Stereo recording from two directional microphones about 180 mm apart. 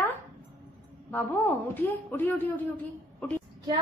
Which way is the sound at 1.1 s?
10° left (ahead or behind).